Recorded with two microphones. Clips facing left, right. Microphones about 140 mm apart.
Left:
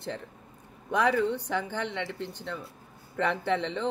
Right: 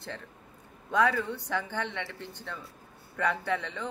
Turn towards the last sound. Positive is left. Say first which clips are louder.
# left 4 dB
turn(degrees=20)  # may be behind; listen again after turning